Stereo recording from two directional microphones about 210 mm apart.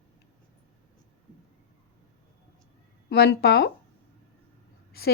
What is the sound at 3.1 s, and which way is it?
Speech, 50° left (ahead or behind).